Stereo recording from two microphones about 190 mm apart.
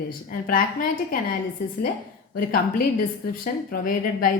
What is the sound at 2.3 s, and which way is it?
A woman's voice, 50° left (ahead or behind).